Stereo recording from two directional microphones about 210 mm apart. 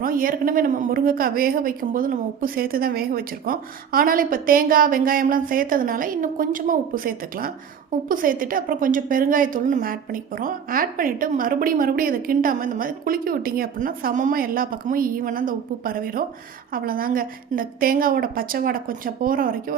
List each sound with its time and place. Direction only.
0.0 s a woman's voice: 40° right (ahead or behind)